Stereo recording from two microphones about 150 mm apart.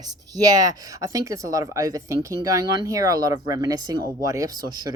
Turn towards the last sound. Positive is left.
turn(degrees=-25)  # may be behind; listen again after turning